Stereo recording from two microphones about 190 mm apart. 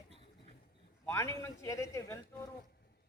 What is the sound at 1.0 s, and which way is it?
Speech, 15° left (ahead or behind).